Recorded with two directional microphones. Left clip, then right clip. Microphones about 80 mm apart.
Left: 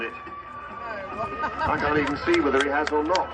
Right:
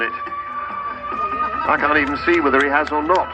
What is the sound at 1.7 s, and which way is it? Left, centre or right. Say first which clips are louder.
Speech: right 8 dB; right.